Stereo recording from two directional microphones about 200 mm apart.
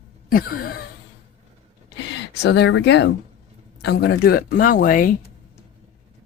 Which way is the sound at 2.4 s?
55° left (ahead or behind).